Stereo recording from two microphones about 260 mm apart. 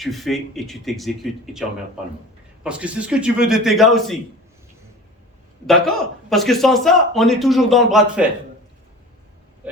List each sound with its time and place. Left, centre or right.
0.0 s speech: centre
2.6 s speech: centre
5.6 s speech: centre